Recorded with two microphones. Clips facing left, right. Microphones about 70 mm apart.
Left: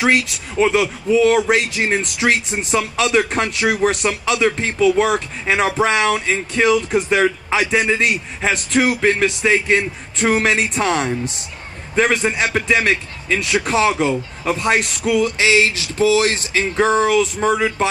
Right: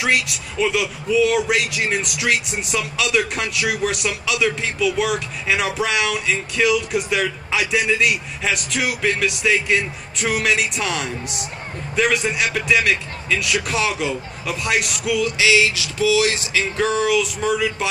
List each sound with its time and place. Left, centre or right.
0.0 s speech: left